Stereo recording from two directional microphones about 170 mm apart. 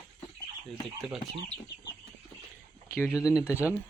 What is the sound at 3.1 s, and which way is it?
Speech, 5° right (ahead or behind).